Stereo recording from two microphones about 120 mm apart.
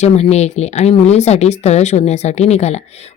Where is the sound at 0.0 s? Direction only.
65° left (ahead or behind).